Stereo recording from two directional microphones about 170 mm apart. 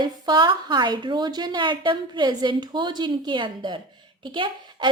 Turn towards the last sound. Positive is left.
turn(degrees=-30)  # may be behind; listen again after turning